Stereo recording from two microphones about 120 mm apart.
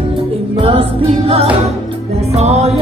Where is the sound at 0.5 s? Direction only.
45° right (ahead or behind).